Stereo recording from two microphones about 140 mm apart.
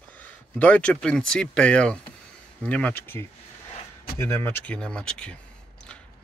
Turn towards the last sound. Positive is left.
turn(degrees=5)  # may be behind; listen again after turning